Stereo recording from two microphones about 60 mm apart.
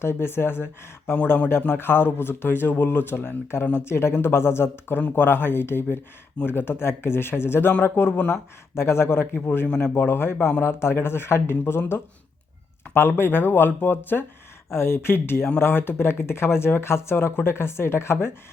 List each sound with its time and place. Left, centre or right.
0.0 s speech: left